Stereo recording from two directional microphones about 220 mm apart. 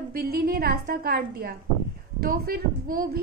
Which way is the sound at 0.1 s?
45° right (ahead or behind).